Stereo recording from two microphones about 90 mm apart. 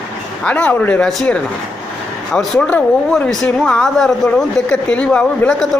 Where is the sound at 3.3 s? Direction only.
10° left (ahead or behind).